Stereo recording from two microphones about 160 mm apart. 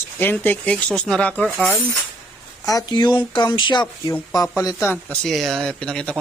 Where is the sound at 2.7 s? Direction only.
25° left (ahead or behind); by 6.2 s 5° left (ahead or behind).